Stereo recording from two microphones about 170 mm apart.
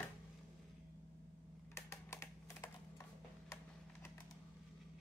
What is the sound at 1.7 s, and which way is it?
Typing, 15° left (ahead or behind).